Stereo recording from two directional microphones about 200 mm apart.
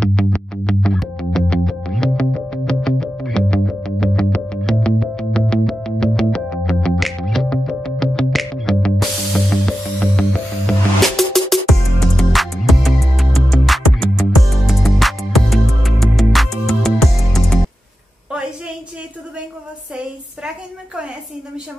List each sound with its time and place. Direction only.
0.0 s music: 5° left (ahead or behind)